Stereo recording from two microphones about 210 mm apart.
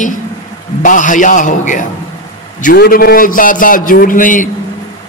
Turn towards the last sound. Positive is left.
turn(degrees=40)  # may be behind; listen again after turning